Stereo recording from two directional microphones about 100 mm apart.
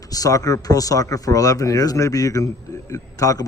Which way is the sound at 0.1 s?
35° left (ahead or behind).